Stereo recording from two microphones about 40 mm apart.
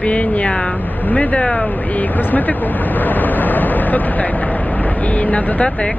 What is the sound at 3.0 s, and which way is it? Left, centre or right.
Vehicle, left.